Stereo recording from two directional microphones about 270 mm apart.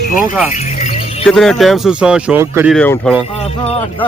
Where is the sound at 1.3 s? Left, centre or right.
Centre.